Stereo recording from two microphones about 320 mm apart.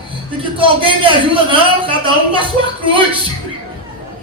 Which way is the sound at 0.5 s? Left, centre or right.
Centre.